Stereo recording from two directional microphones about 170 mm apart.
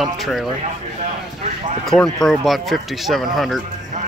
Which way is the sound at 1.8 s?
Centre (ahead or behind).